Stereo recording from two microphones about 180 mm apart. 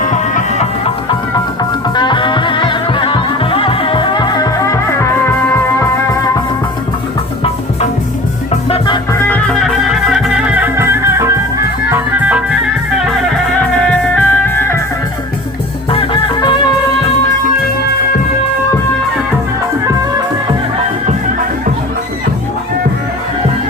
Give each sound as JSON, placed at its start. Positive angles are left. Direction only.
{"t": 0.0, "sound": "music", "side_deg": 45}
{"t": 2.0, "sound": "music", "side_deg": 25}
{"t": 9.1, "sound": "music", "side_deg": 10}
{"t": 13.9, "sound": "music", "side_deg": 10}
{"t": 15.9, "sound": "music", "side_deg": 30}